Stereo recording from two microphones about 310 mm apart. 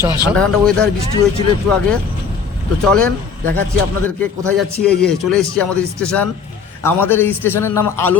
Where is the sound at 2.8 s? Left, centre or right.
Centre.